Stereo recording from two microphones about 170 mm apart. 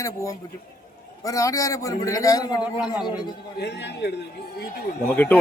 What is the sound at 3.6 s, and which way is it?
A man's voice, 90° left.